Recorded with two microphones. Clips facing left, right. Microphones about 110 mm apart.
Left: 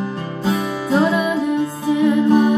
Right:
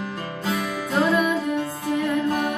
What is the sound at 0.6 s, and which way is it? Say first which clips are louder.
Music: left 5 dB; 10° left (ahead or behind).